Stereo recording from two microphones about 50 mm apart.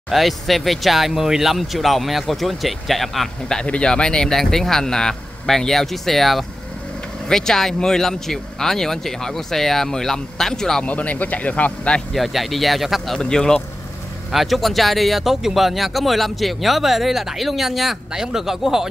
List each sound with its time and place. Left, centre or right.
0.1 s speech: centre
3.6 s speech: left
10.8 s speech: left
12.1 s speech: centre
13.2 s speech: centre
14.3 s speech: centre